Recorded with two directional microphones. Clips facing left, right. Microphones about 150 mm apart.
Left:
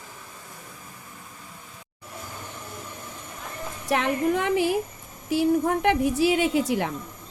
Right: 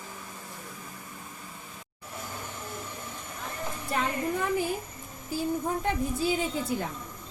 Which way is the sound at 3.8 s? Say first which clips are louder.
Left 7 dB; 80° left.